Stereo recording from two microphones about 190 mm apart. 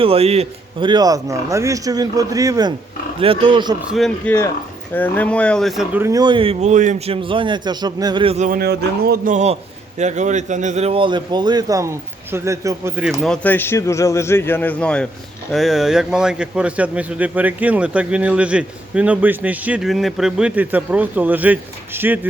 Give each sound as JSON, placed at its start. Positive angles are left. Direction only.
{"t": 0.0, "sound": "a man's voice", "side_deg": -30}
{"t": 3.8, "sound": "speech", "side_deg": 0}
{"t": 4.3, "sound": "a man's voice", "side_deg": 15}
{"t": 6.0, "sound": "a man's voice", "side_deg": -20}
{"t": 8.4, "sound": "speech", "side_deg": -55}
{"t": 9.3, "sound": "a man's voice", "side_deg": -35}
{"t": 13.2, "sound": "a man's voice", "side_deg": 5}